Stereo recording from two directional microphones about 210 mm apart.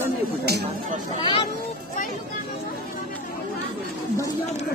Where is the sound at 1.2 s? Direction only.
25° left (ahead or behind).